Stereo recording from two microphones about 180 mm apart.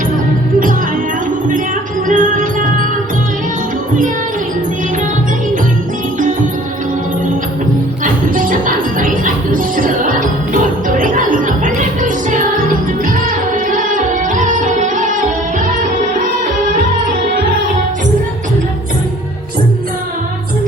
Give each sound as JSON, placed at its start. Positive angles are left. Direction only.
{"t": 2.0, "sound": "music", "side_deg": -45}
{"t": 8.0, "sound": "music", "side_deg": -50}